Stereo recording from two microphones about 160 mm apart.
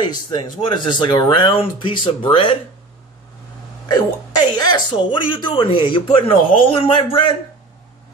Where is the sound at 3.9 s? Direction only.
25° left (ahead or behind).